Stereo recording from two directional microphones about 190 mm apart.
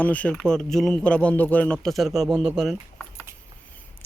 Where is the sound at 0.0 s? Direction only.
5° left (ahead or behind).